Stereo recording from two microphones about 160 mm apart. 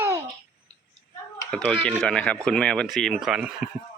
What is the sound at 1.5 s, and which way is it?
Speech, 5° left (ahead or behind).